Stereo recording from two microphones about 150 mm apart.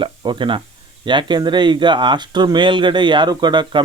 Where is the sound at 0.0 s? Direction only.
35° right (ahead or behind).